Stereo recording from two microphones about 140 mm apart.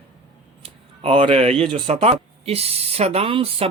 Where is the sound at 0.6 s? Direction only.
40° right (ahead or behind).